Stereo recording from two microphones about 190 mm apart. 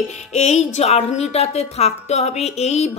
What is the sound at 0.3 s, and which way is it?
Speech, 35° left (ahead or behind).